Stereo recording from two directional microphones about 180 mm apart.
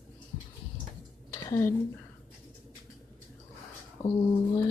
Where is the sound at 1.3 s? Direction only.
20° left (ahead or behind).